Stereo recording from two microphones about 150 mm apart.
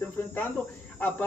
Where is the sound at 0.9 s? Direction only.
10° left (ahead or behind).